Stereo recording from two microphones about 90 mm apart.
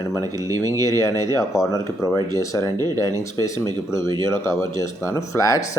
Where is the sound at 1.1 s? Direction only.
45° right (ahead or behind).